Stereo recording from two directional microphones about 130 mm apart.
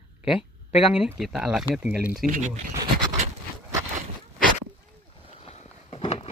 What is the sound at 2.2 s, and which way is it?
Speech, 90° right.